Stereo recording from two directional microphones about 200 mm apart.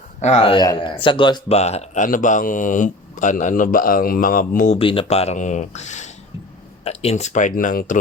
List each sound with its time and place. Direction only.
0.2 s speech: 35° left (ahead or behind)
4.8 s speech: 25° left (ahead or behind)